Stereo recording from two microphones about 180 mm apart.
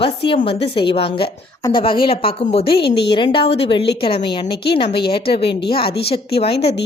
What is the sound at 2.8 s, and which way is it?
Speech, 65° left (ahead or behind).